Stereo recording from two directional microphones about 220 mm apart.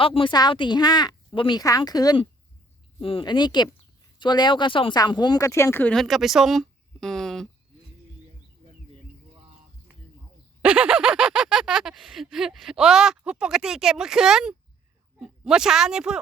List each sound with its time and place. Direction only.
0.0 s speech: 25° left (ahead or behind); by 7.4 s centre (ahead or behind)
10.6 s speech: 5° right (ahead or behind)